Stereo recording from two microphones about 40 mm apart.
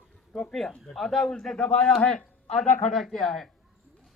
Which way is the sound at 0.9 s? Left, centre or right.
Centre.